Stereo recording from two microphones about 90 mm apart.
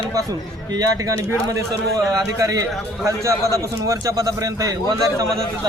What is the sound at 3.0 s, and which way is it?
A man's voice, 35° right (ahead or behind).